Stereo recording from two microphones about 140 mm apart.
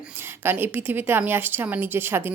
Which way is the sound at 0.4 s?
15° right (ahead or behind).